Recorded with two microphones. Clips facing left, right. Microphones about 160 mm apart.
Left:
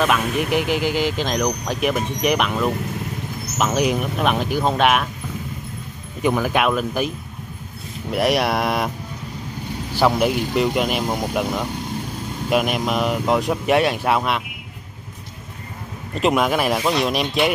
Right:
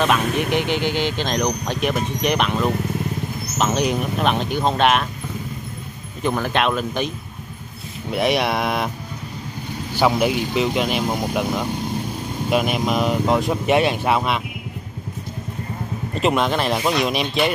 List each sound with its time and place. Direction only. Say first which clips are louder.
0.0 s speech: even; 5° left (ahead or behind)
6.2 s speech: left 2 dB; 10° left (ahead or behind)
8.1 s speech: left 1 dB; centre (ahead or behind)
9.9 s speech: even; centre (ahead or behind)
16.2 s speech: left 1 dB; 5° left (ahead or behind)